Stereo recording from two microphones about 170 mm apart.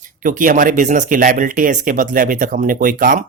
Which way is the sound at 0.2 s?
50° right (ahead or behind).